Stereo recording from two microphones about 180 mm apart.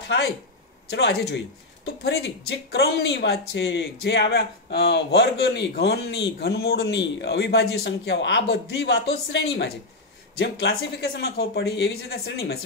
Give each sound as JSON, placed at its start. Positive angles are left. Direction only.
{"t": 0.8, "sound": "speech", "side_deg": 65}